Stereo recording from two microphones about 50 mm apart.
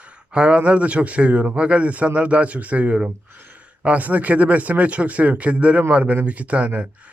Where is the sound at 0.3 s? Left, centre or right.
Right.